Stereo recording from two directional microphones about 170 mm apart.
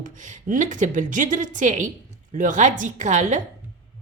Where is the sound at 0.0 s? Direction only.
50° right (ahead or behind).